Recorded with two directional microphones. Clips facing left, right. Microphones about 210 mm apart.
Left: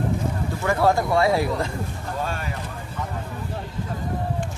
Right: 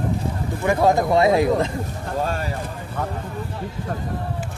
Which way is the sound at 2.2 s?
40° right (ahead or behind).